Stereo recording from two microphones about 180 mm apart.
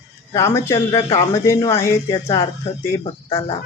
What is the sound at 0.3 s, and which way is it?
Speech, 15° left (ahead or behind).